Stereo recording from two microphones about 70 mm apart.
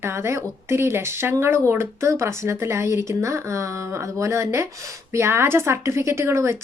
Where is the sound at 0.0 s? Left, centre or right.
Right.